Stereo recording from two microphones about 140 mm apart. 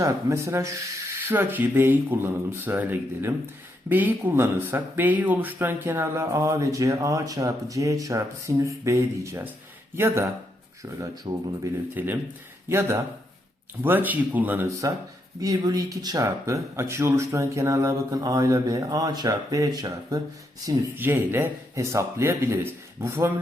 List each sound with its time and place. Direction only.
0.0 s speech: 20° right (ahead or behind)
11.9 s speech: 15° right (ahead or behind)
15.4 s speech: 25° right (ahead or behind)
20.7 s speech: 15° right (ahead or behind)